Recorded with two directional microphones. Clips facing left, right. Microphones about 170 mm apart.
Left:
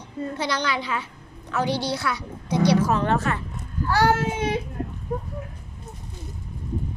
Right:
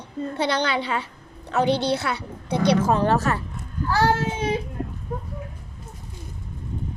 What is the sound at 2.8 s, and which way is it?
Speech, 35° right (ahead or behind).